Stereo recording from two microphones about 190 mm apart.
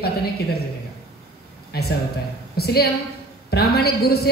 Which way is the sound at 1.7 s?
55° left (ahead or behind).